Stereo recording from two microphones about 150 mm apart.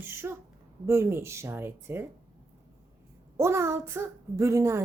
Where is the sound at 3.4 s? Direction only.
20° right (ahead or behind).